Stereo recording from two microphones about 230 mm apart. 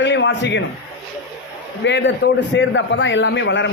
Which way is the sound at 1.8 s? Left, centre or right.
Left.